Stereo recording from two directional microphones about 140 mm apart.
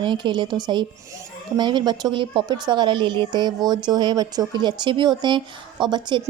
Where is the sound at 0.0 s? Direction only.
35° right (ahead or behind).